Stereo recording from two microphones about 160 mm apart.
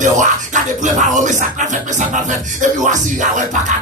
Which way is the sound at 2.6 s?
50° right (ahead or behind).